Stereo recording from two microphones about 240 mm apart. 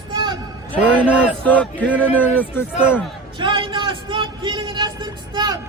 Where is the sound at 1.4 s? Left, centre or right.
Centre.